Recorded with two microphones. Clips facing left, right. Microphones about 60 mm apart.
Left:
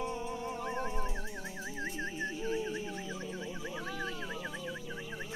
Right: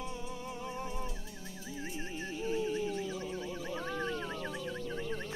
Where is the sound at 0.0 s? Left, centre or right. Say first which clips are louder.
Left 5 dB; left.